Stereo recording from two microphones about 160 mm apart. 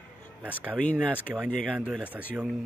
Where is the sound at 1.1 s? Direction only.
10° right (ahead or behind).